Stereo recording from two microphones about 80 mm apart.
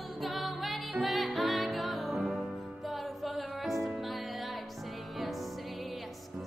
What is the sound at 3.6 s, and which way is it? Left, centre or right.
Music, centre.